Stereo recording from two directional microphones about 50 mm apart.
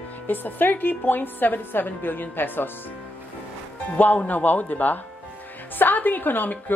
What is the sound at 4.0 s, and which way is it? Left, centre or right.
Speech, left.